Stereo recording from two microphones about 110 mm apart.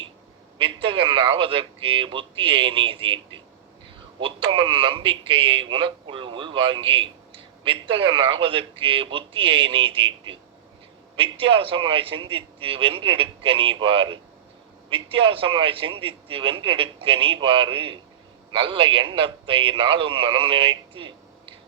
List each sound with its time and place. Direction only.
0.6 s a man's voice: 55° right (ahead or behind)